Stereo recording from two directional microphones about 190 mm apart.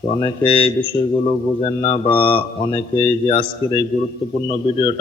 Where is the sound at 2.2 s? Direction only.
25° left (ahead or behind).